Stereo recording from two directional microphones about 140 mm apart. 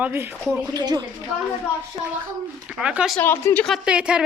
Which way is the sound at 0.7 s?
30° right (ahead or behind).